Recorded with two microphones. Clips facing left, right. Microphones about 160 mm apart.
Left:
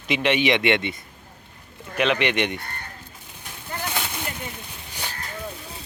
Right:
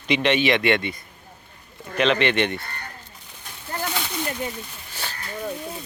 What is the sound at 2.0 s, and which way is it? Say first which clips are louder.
Speech: right 2 dB; 10° left (ahead or behind).